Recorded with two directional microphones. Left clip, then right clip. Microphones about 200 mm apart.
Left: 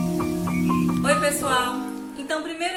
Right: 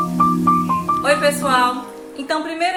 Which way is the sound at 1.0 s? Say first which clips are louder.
Right 3 dB; 15° right (ahead or behind).